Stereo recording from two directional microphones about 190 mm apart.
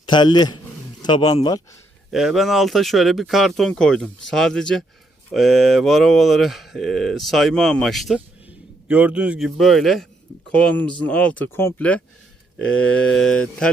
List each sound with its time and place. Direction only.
0.0 s a man's voice: 25° left (ahead or behind)
2.0 s speech: centre (ahead or behind)